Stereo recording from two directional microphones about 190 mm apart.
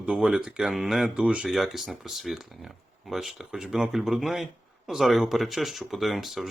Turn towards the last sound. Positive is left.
turn(degrees=0)  # may be behind; listen again after turning